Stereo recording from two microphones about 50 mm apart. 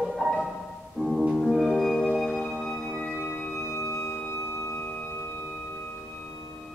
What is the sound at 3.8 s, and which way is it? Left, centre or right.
Music, left.